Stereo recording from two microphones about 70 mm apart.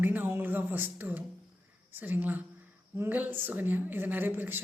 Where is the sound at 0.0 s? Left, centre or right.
Right.